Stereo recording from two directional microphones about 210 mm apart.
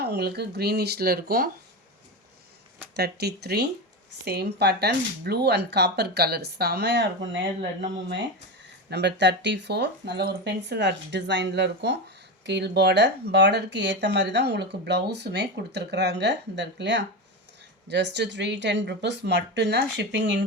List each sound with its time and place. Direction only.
0.0 s speech: 50° right (ahead or behind)
2.9 s speech: 50° right (ahead or behind)